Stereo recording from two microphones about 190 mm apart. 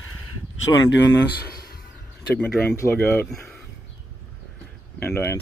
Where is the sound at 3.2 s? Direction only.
Centre (ahead or behind).